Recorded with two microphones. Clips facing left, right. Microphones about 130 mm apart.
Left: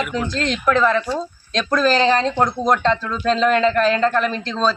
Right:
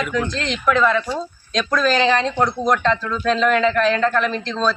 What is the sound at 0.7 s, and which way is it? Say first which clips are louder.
A man's voice: even; 35° left (ahead or behind).